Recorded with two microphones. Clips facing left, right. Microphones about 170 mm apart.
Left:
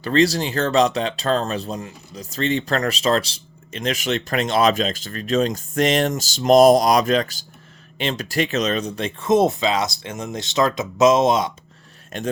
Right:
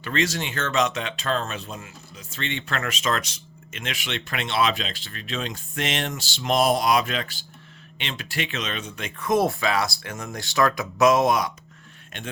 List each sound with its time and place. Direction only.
0.0 s speech: 35° left (ahead or behind)